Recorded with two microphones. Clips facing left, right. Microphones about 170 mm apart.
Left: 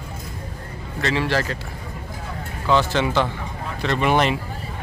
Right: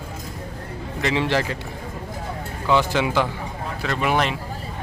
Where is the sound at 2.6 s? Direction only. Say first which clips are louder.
Even; 15° right (ahead or behind).